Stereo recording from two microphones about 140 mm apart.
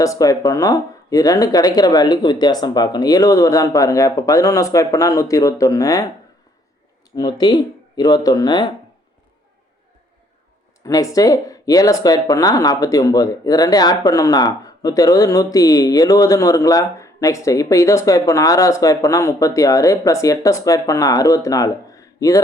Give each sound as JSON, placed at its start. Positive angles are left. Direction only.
{"t": 0.0, "sound": "speech", "side_deg": 25}
{"t": 7.2, "sound": "speech", "side_deg": 30}
{"t": 10.8, "sound": "speech", "side_deg": 25}